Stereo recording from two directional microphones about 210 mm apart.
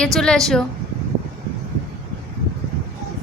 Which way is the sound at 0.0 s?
5° left (ahead or behind).